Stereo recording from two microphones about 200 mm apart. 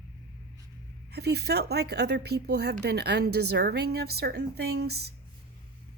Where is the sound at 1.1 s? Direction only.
55° right (ahead or behind).